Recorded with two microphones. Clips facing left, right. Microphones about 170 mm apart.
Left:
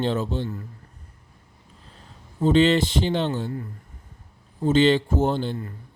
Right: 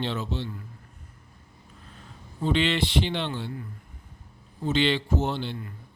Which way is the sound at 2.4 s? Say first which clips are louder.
Left 7 dB; 40° left (ahead or behind).